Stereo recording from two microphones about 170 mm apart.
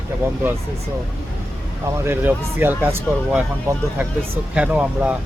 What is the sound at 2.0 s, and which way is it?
Speech, 10° right (ahead or behind).